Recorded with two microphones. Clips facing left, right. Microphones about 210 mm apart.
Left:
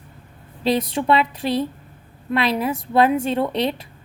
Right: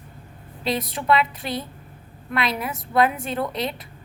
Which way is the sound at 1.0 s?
30° left (ahead or behind).